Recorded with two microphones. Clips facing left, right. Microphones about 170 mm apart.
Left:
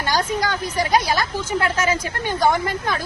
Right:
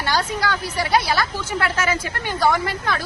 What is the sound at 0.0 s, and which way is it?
Speech, 15° left (ahead or behind).